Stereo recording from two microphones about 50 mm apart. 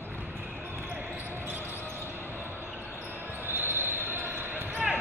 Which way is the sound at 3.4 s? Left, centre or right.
Right.